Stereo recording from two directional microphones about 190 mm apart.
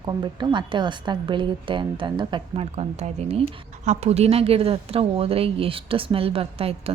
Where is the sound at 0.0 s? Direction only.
20° right (ahead or behind).